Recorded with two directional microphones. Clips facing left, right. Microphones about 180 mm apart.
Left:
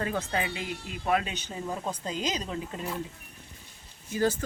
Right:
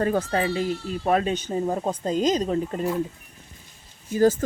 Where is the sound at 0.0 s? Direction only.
40° right (ahead or behind).